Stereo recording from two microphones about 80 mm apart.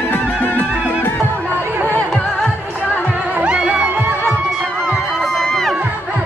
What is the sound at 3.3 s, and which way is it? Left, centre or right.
Music, centre.